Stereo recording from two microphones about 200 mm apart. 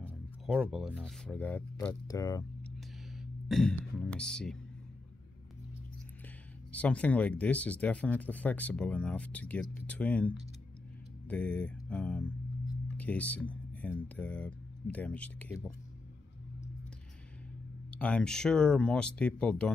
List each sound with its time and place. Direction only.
0.5 s speech: 5° right (ahead or behind); by 2.4 s 20° left (ahead or behind)
3.2 s speech: centre (ahead or behind)
6.7 s speech: 5° left (ahead or behind)
17.9 s speech: 5° left (ahead or behind)